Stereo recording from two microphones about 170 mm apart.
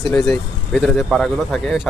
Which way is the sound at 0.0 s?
Centre (ahead or behind).